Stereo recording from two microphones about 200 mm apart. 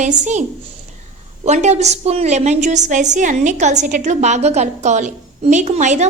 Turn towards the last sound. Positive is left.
turn(degrees=-35)  # may be behind; listen again after turning